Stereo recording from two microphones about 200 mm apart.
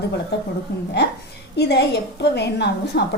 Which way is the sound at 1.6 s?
55° left (ahead or behind).